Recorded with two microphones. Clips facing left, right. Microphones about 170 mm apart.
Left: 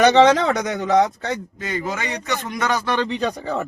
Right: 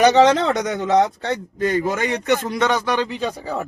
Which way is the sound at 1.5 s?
50° right (ahead or behind).